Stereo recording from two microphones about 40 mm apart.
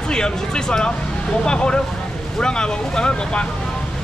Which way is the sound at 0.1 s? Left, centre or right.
Centre.